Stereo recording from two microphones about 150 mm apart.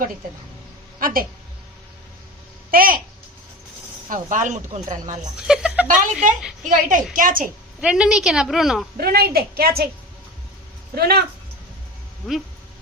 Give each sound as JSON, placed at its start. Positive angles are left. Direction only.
{"t": 0.9, "sound": "a woman's voice", "side_deg": -70}
{"t": 2.6, "sound": "a child's voice", "side_deg": -70}
{"t": 4.1, "sound": "speech", "side_deg": -60}
{"t": 5.4, "sound": "speech", "side_deg": -5}
{"t": 5.9, "sound": "speech", "side_deg": -55}
{"t": 7.8, "sound": "a woman's voice", "side_deg": -5}
{"t": 9.0, "sound": "a woman's voice", "side_deg": -90}
{"t": 10.9, "sound": "a woman's voice", "side_deg": -90}